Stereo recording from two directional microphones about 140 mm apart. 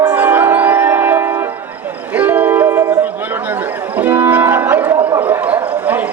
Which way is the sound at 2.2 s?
10° right (ahead or behind).